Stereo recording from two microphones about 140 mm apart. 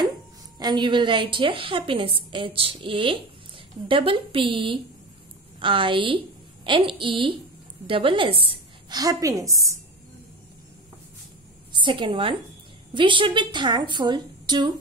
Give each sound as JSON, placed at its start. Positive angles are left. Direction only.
{"t": 0.6, "sound": "a woman's voice", "side_deg": -30}
{"t": 8.9, "sound": "a woman's voice", "side_deg": -25}
{"t": 11.7, "sound": "a woman's voice", "side_deg": -35}